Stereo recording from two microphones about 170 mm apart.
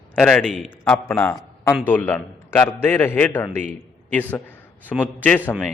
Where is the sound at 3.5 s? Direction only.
45° right (ahead or behind).